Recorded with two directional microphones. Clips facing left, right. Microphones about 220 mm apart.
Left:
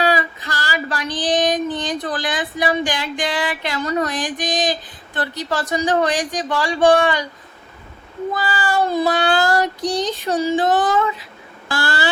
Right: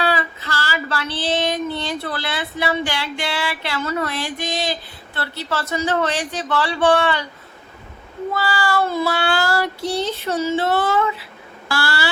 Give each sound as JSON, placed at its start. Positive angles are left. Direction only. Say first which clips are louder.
{"t": 0.0, "sound": "female singing", "louder": "left 3 dB", "side_deg": 15}
{"t": 4.0, "sound": "speech", "louder": "left 2 dB", "side_deg": 15}
{"t": 8.3, "sound": "speech", "louder": "right 1 dB", "side_deg": 15}
{"t": 11.7, "sound": "a sound", "louder": "left 2 dB", "side_deg": 20}